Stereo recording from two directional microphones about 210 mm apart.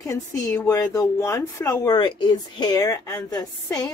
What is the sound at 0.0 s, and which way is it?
Speech, 15° left (ahead or behind).